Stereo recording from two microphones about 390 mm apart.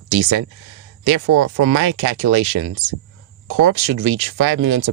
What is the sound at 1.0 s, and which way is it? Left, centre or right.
Speech, right.